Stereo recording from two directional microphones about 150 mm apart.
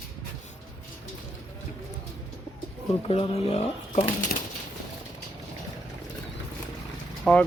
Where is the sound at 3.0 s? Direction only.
40° left (ahead or behind).